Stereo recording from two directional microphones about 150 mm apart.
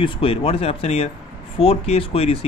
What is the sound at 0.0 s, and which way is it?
Speech, 40° left (ahead or behind).